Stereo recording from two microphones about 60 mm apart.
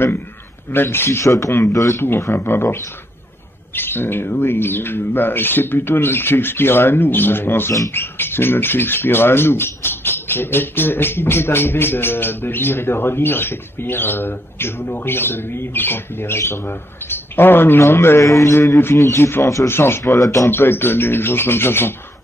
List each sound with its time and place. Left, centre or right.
0.7 s speech: left
1.2 s speech: left
2.3 s speech: left
18.2 s speech: left
18.9 s speech: left
19.7 s speech: left
20.4 s speech: left